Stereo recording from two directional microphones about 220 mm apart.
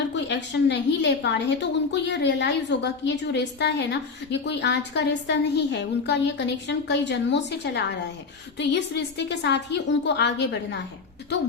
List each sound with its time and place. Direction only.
0.1 s a woman's voice: 50° left (ahead or behind)